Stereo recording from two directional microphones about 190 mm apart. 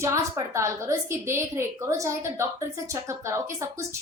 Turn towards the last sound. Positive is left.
turn(degrees=-15)  # may be behind; listen again after turning